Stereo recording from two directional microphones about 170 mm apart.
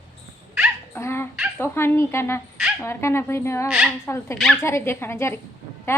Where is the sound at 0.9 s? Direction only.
15° left (ahead or behind).